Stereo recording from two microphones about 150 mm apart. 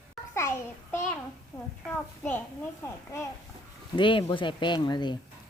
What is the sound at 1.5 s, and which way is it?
A woman's voice, 10° left (ahead or behind).